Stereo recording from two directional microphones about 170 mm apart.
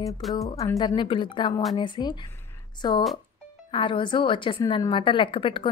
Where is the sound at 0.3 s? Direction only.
20° left (ahead or behind).